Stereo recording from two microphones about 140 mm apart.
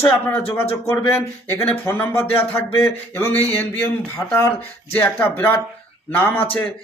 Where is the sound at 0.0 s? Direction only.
15° left (ahead or behind).